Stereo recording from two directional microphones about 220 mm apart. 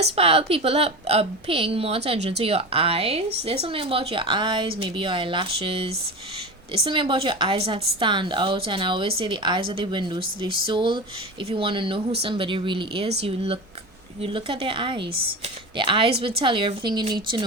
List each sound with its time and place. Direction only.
0.0 s a woman's voice: 25° right (ahead or behind)